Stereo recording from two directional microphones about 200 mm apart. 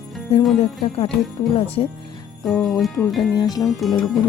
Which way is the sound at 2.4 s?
Centre (ahead or behind).